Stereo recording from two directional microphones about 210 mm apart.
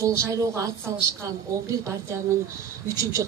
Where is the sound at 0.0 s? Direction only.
15° right (ahead or behind).